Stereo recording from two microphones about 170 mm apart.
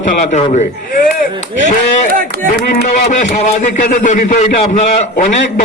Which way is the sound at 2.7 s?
45° left (ahead or behind).